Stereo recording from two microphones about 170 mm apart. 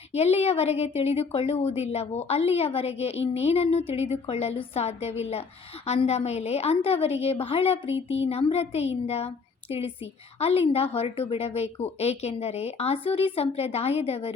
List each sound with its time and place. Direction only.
0.1 s a woman's voice: 40° left (ahead or behind)
7.9 s a sound: 90° left
8.3 s a woman's voice: 35° left (ahead or behind)